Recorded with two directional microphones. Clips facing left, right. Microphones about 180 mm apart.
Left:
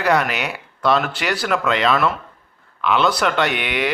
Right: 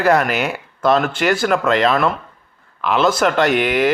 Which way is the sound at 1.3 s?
45° right (ahead or behind).